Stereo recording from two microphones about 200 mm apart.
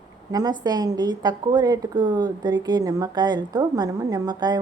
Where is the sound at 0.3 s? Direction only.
20° right (ahead or behind).